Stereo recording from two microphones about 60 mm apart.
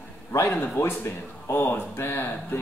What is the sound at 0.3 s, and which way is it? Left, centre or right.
A man's voice, left.